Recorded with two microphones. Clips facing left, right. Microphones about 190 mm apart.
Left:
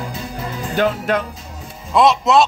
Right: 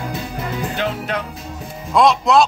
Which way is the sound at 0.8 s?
50° left (ahead or behind).